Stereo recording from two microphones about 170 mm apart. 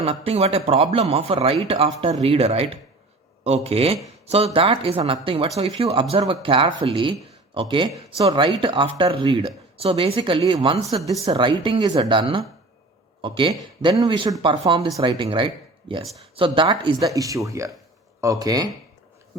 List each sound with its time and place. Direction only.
0.0 s speech: 35° right (ahead or behind)
17.2 s speech: 20° right (ahead or behind)